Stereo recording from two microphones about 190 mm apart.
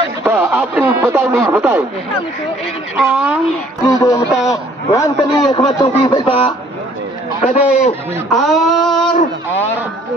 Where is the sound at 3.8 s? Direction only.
15° left (ahead or behind).